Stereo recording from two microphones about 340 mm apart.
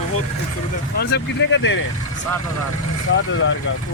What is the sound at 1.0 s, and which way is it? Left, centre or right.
Speech, left.